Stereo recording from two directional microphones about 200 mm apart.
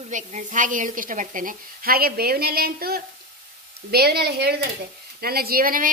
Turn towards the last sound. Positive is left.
turn(degrees=-45)  # may be behind; listen again after turning